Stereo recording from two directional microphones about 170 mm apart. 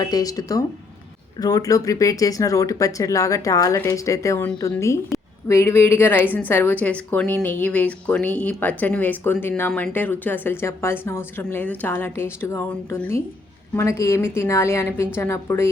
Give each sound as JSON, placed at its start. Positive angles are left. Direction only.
{"t": 0.0, "sound": "a woman's voice", "side_deg": 20}